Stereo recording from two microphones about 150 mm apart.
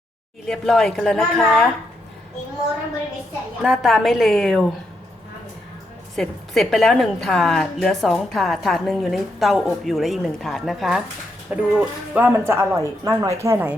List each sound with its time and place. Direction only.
0.4 s a woman's voice: 5° left (ahead or behind)
3.6 s a woman's voice: centre (ahead or behind)
6.1 s a woman's voice: centre (ahead or behind); by 13.7 s 15° right (ahead or behind)